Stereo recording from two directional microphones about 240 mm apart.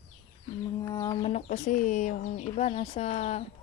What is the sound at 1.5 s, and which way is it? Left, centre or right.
A woman's voice, left.